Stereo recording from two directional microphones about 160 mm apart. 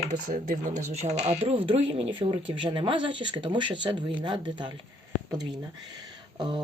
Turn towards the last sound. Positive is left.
turn(degrees=-25)  # may be behind; listen again after turning